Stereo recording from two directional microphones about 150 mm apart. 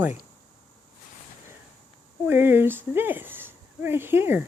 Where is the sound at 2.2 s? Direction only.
15° right (ahead or behind).